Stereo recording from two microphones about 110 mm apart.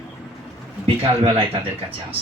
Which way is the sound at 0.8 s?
55° right (ahead or behind).